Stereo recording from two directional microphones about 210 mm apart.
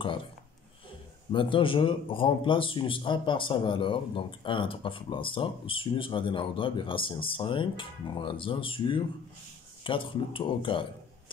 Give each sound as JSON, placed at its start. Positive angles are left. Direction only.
{"t": 1.3, "sound": "a man's voice", "side_deg": 25}